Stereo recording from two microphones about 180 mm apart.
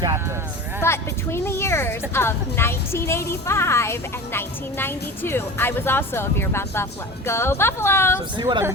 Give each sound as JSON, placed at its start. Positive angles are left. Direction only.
{"t": 0.9, "sound": "a woman's voice", "side_deg": 15}
{"t": 8.4, "sound": "speech", "side_deg": -25}